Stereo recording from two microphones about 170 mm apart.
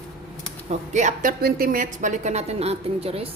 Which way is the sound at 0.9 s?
50° right (ahead or behind).